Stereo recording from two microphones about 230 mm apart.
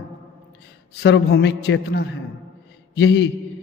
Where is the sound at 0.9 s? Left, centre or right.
Left.